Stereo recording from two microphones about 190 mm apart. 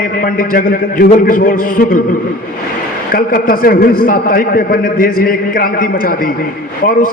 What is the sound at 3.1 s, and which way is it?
A man's voice, 50° left (ahead or behind).